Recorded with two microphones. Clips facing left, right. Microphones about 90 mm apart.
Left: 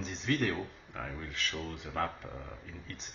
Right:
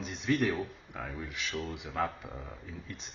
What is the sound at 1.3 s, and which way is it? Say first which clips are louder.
Speech: right 1 dB; 10° right (ahead or behind).